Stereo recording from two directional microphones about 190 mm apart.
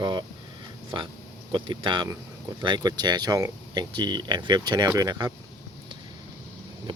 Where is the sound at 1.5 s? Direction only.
25° right (ahead or behind).